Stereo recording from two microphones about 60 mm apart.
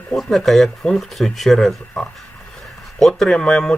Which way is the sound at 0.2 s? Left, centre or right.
Centre.